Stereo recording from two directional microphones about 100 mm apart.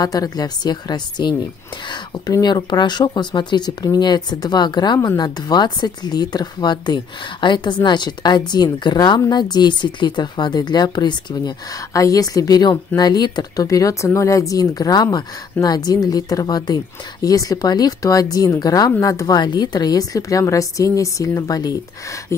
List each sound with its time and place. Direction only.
0.0 s speech: 40° left (ahead or behind)
11.9 s speech: 35° left (ahead or behind)